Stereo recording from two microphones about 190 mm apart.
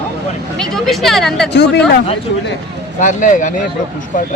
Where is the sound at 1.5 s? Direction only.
65° left (ahead or behind).